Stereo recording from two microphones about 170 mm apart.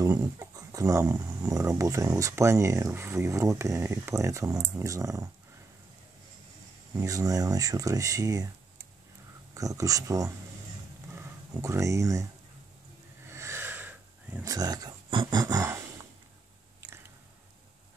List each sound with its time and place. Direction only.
0.0 s speech: 20° right (ahead or behind)
6.9 s speech: 20° right (ahead or behind)
9.5 s speech: 20° right (ahead or behind)
13.3 s a sound: 15° right (ahead or behind)